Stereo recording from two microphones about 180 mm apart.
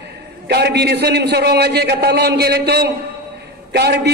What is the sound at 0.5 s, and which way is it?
A man's voice, 65° right (ahead or behind).